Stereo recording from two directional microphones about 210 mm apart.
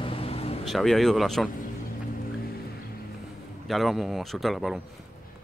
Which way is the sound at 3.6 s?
Centre (ahead or behind).